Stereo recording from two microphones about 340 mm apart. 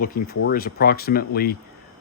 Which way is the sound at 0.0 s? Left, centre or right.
Left.